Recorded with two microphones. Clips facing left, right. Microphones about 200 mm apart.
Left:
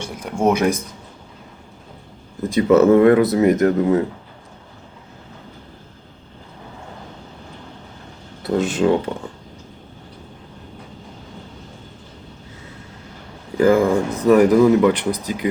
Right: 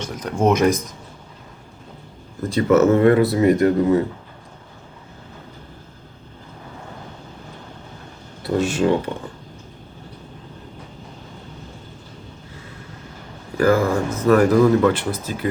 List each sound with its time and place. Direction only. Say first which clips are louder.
0.0 s speech: even; 10° left (ahead or behind)
2.5 s speech: left 2 dB; 15° left (ahead or behind)
8.5 s speech: left 1 dB; 20° left (ahead or behind)
13.6 s speech: left 3 dB; 15° left (ahead or behind)